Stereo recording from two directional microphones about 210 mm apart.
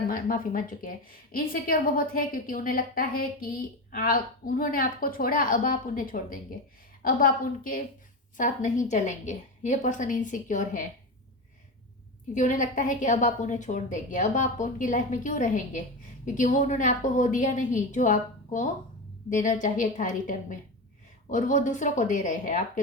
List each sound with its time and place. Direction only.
0.1 s a woman's voice: 45° left (ahead or behind)
12.3 s a woman's voice: 35° left (ahead or behind)